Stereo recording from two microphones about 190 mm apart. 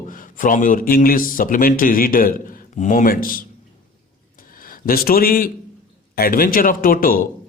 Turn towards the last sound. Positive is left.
turn(degrees=50)  # may be behind; listen again after turning